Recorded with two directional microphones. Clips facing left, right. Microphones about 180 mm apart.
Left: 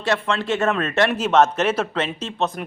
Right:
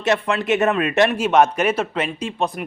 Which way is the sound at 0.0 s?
15° right (ahead or behind).